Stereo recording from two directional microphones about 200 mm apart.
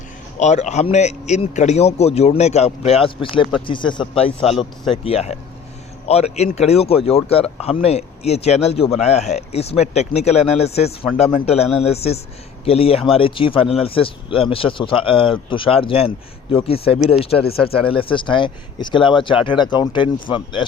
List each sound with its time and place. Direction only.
0.3 s speech: 35° left (ahead or behind)